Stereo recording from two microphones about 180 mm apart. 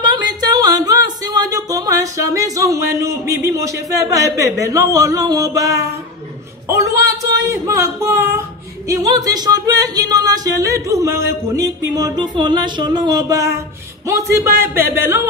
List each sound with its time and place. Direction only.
0.0 s music: 20° right (ahead or behind)
3.9 s speech: 20° right (ahead or behind)
7.1 s a man's voice: 20° right (ahead or behind)
14.6 s a sound: 15° right (ahead or behind)